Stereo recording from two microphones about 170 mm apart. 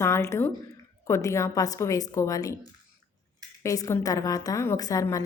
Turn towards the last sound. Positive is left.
turn(degrees=20)  # may be behind; listen again after turning